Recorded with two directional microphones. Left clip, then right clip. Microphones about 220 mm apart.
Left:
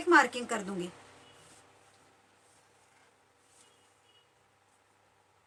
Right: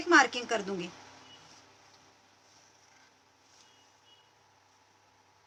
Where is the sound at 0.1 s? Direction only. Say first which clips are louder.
Right 1 dB; 20° right (ahead or behind).